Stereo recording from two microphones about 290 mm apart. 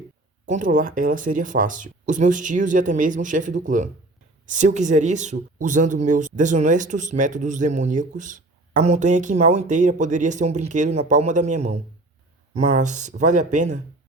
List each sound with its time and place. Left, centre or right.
0.4 s speech: right